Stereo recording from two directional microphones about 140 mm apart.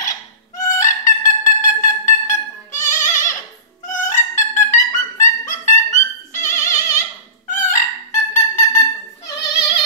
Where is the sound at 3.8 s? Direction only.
70° left (ahead or behind).